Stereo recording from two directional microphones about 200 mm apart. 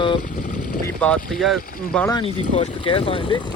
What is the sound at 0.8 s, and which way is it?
Speech, 5° left (ahead or behind).